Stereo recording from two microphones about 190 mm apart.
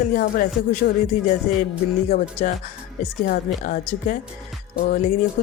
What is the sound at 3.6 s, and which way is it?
Speech, 45° left (ahead or behind).